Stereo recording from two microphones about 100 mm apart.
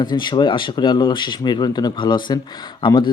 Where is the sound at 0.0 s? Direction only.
50° left (ahead or behind).